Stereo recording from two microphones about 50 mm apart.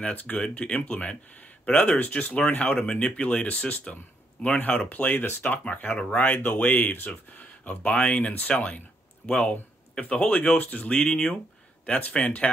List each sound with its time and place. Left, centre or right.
0.0 s speech: left